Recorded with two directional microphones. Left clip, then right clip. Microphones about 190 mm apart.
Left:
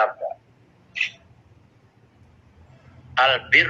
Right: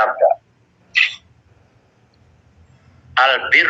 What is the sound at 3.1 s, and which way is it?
Speech, 45° right (ahead or behind).